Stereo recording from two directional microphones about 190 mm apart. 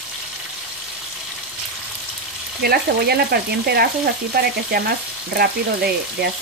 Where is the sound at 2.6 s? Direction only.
55° right (ahead or behind).